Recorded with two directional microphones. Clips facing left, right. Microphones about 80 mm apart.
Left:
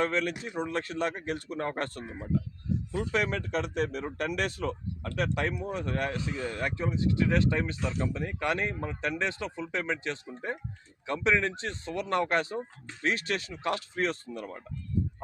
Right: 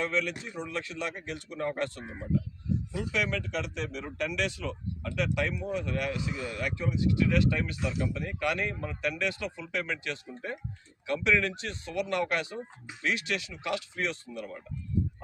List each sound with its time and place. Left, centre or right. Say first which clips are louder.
0.0 s speech: left 2 dB; left
2.9 s speech: left 3 dB; left